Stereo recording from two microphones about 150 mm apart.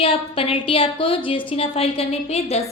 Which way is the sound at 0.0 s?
35° left (ahead or behind).